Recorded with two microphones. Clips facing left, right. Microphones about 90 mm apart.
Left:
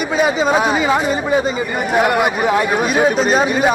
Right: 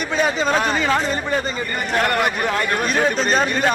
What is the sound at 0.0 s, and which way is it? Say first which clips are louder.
A man's voice: left 4 dB; 5° left (ahead or behind).